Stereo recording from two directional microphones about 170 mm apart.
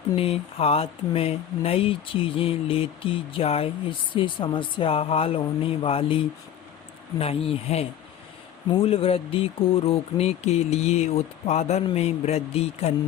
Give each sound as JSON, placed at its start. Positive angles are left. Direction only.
{"t": 0.2, "sound": "speech", "side_deg": 35}
{"t": 7.2, "sound": "speech", "side_deg": 35}